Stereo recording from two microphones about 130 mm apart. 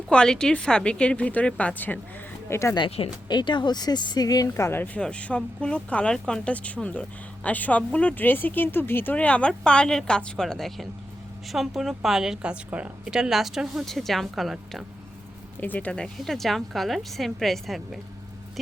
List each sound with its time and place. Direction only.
0.1 s speech: 5° left (ahead or behind)
2.7 s a woman's voice: 45° left (ahead or behind); by 14.8 s centre (ahead or behind)
15.6 s a woman's voice: 10° left (ahead or behind)